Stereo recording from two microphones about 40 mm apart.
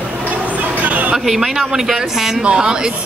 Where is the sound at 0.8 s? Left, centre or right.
Right.